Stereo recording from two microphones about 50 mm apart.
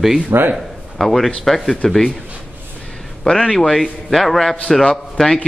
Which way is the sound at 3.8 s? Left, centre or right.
Centre.